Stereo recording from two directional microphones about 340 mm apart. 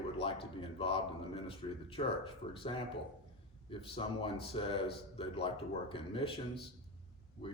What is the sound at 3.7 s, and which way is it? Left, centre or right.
Speech, centre.